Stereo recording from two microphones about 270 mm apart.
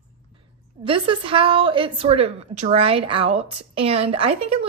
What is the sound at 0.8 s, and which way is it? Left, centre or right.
A woman's voice, centre.